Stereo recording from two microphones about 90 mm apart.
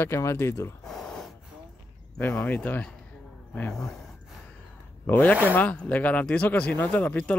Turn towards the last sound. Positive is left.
turn(degrees=15)  # may be behind; listen again after turning